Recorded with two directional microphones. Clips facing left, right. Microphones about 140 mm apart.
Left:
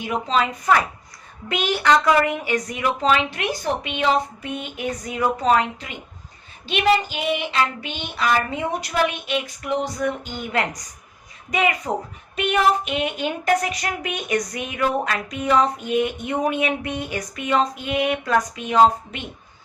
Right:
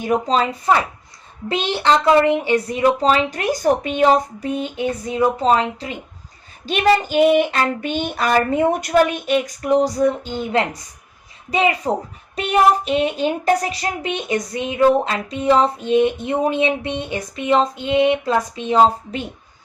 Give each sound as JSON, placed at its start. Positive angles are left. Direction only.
{"t": 0.0, "sound": "speech", "side_deg": -40}
{"t": 6.7, "sound": "a sound", "side_deg": -45}
{"t": 11.9, "sound": "speech", "side_deg": -30}